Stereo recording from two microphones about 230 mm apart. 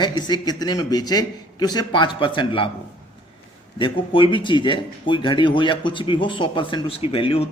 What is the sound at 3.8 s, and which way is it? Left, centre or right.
Speech, left.